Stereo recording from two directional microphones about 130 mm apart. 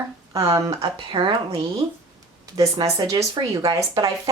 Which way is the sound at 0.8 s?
40° right (ahead or behind).